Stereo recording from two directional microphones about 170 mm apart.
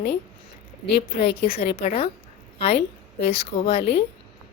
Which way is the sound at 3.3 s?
35° left (ahead or behind).